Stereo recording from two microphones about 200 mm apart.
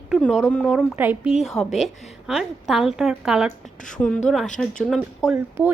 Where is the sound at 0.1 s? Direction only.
Centre (ahead or behind).